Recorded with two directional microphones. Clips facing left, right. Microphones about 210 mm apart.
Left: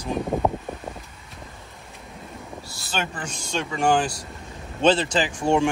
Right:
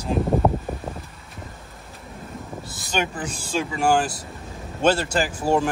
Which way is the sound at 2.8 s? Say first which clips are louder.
Right 4 dB; 10° right (ahead or behind).